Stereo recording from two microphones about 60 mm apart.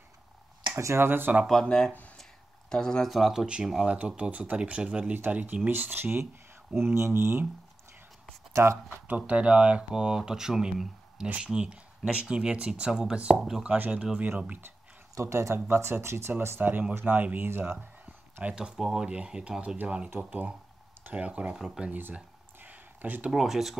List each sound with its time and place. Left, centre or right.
0.7 s speech: right
1.5 s speech: centre
3.2 s speech: centre
4.2 s speech: right
8.6 s speech: right
9.0 s speech: right
15.1 s speech: right
16.4 s speech: right
18.4 s speech: centre
22.6 s a sound: right
23.3 s speech: centre